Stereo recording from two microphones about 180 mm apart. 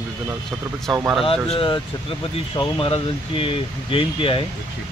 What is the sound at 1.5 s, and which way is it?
Speech, 25° left (ahead or behind).